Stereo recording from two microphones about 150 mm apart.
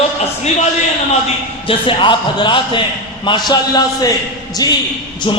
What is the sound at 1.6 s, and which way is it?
A man's voice, 35° left (ahead or behind).